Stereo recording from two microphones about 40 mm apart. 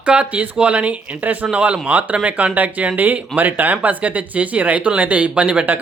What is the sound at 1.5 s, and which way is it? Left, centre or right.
Speech, right.